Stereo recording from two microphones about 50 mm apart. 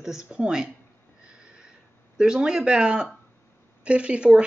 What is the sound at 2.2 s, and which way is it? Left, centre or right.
Speech, centre.